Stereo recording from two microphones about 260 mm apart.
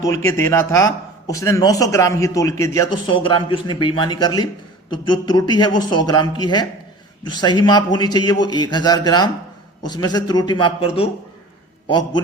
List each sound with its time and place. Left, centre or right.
0.0 s a man's voice: centre